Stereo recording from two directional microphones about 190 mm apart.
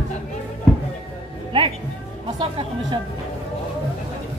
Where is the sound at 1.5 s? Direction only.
25° right (ahead or behind).